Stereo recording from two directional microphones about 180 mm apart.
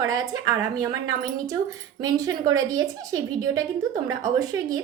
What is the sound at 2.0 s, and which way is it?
A woman's voice, 20° right (ahead or behind).